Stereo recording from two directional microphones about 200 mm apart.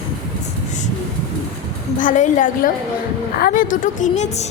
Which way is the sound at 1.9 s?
40° left (ahead or behind).